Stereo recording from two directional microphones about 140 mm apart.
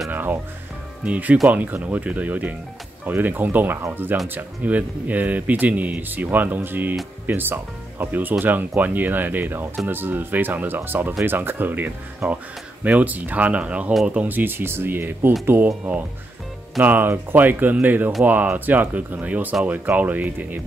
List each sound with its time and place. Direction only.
0.1 s speech: 15° right (ahead or behind)